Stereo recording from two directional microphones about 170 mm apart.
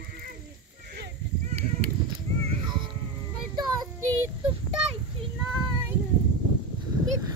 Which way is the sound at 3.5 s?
25° right (ahead or behind).